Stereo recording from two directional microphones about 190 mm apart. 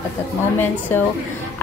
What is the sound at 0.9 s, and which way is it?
Speech, 10° left (ahead or behind).